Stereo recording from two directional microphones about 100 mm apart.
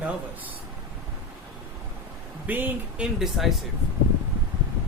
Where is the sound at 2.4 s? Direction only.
20° right (ahead or behind).